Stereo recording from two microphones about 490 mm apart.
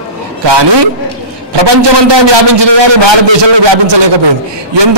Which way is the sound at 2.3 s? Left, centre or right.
Right.